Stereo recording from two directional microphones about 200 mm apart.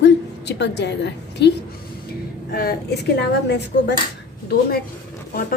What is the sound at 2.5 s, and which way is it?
Speech, 50° left (ahead or behind).